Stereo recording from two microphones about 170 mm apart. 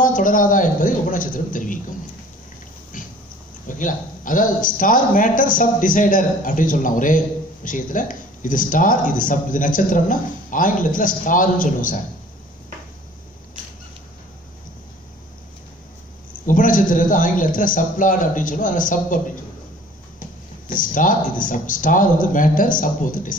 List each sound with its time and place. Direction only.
0.0 s speech: 55° left (ahead or behind)
3.6 s speech: 50° left (ahead or behind)
16.4 s speech: 50° left (ahead or behind)
20.6 s speech: 50° left (ahead or behind)